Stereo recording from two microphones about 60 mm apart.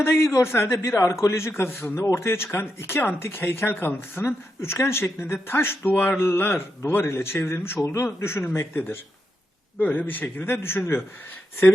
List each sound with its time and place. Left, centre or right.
0.0 s a man's voice: left
4.6 s a man's voice: left
7.8 s a man's voice: left
8.0 s a man's voice: left
9.8 s speech: left
10.5 s a man's voice: left